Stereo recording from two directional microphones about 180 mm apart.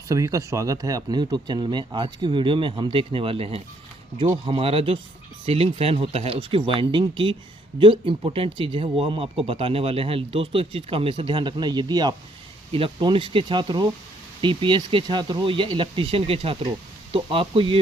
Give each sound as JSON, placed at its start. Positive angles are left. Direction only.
{"t": 0.1, "sound": "speech", "side_deg": -15}